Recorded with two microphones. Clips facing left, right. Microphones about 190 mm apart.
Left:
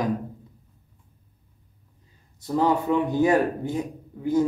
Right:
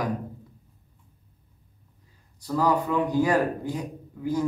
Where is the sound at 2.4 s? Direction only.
25° left (ahead or behind).